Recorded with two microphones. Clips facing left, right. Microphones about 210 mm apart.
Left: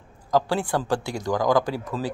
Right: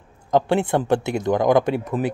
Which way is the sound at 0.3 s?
25° right (ahead or behind).